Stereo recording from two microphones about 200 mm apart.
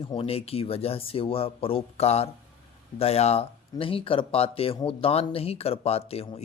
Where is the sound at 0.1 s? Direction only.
30° left (ahead or behind).